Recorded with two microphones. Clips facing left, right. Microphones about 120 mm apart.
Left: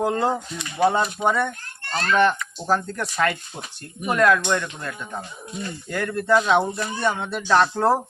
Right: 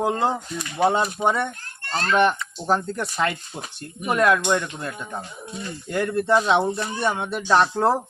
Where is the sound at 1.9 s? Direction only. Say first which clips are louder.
Even; 30° right (ahead or behind).